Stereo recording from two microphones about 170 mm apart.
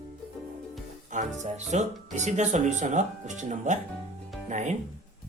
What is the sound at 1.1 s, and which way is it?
Speech, 45° right (ahead or behind).